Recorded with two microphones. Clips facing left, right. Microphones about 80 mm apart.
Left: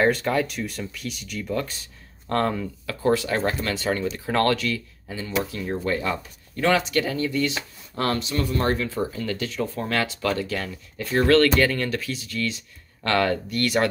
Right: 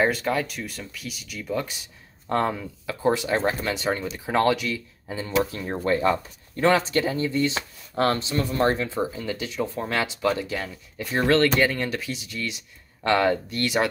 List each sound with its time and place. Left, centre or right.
0.0 s speech: centre
5.4 s speech: right